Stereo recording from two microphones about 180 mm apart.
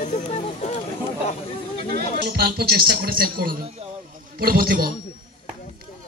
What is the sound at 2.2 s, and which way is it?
A man's voice, 60° right (ahead or behind).